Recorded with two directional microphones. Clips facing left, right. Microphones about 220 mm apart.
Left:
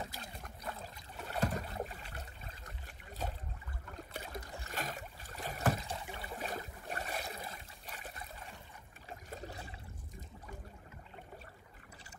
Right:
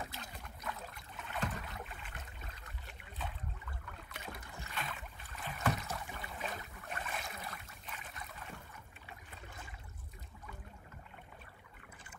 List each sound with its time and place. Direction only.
0.1 s boat: 40° left (ahead or behind)
6.3 s boat: 40° left (ahead or behind)